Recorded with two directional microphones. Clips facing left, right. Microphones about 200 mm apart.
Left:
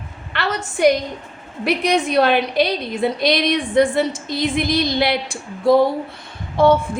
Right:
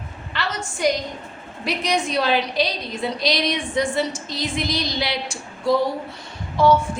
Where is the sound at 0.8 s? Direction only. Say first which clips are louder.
Left 6 dB; 60° left (ahead or behind).